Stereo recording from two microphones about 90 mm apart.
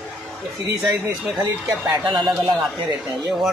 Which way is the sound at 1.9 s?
60° right (ahead or behind).